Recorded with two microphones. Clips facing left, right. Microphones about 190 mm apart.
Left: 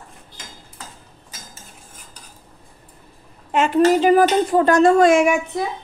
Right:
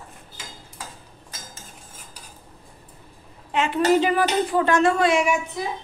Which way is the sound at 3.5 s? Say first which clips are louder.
Left 6 dB; 45° left (ahead or behind).